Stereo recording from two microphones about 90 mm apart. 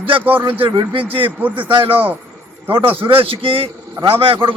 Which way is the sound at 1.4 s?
20° right (ahead or behind).